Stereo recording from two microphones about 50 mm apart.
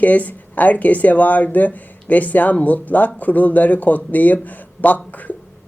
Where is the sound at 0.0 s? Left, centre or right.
Left.